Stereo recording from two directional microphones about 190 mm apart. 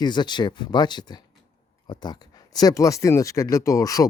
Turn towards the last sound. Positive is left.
turn(degrees=15)  # may be behind; listen again after turning